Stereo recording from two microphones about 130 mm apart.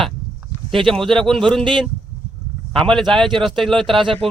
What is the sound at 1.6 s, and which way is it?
Speech, 40° right (ahead or behind).